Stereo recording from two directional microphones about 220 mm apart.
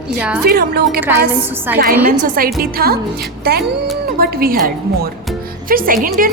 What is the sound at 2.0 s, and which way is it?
Speech, 40° right (ahead or behind).